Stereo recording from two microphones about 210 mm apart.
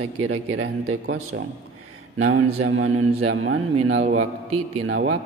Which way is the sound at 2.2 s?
75° right (ahead or behind).